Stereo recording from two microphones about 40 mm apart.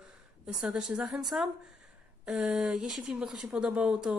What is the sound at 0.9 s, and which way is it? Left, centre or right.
Speech, right.